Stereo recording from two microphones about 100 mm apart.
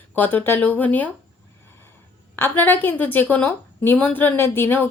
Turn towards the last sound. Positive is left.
turn(degrees=20)  # may be behind; listen again after turning